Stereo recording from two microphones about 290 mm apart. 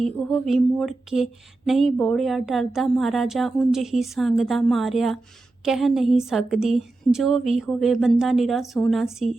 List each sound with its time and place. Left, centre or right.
0.0 s speech: centre